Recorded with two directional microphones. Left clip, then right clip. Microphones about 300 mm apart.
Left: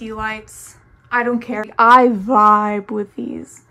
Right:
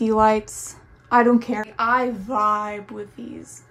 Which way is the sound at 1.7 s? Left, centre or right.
Centre.